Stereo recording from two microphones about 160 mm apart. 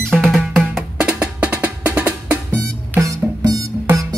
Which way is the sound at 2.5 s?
20° right (ahead or behind).